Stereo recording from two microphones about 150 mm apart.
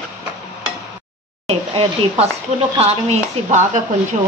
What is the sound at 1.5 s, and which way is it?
A woman's voice, 45° right (ahead or behind).